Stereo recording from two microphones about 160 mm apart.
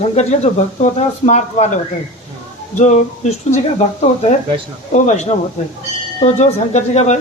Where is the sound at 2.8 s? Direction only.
45° left (ahead or behind).